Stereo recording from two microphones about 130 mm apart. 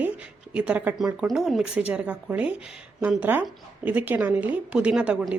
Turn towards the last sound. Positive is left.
turn(degrees=-10)  # may be behind; listen again after turning